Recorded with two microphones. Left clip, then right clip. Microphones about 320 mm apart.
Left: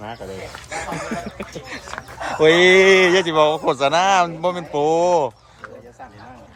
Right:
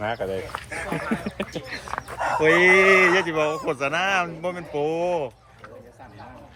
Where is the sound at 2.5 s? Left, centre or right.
Centre.